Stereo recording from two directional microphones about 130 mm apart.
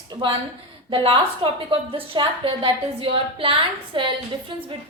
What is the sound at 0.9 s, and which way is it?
A woman's voice, 45° right (ahead or behind).